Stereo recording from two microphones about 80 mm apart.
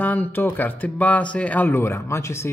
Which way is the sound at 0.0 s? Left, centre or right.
Left.